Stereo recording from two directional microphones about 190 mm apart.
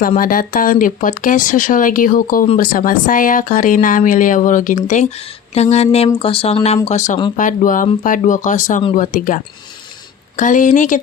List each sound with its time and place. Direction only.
0.2 s speech: 45° left (ahead or behind)